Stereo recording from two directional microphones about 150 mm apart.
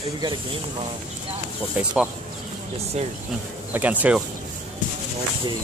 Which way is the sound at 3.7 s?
10° right (ahead or behind).